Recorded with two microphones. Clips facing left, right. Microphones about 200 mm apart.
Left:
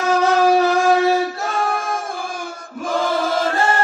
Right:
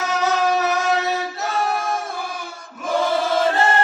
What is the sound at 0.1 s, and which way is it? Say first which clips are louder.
Shofar: left 6 dB; 30° left (ahead or behind).